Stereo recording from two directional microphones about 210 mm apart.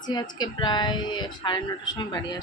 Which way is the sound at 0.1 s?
20° left (ahead or behind).